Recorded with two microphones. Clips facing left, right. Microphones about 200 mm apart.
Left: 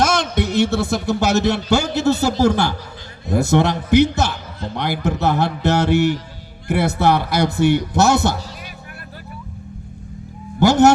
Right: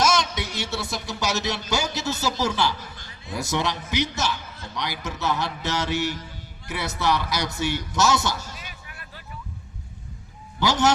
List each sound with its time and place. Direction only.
0.0 s a man's voice: 55° left (ahead or behind)
10.6 s speech: 50° left (ahead or behind)